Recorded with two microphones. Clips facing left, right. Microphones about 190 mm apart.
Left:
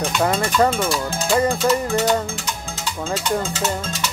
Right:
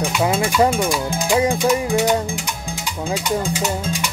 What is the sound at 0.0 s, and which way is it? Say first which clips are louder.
Music: right 1 dB; 10° right (ahead or behind).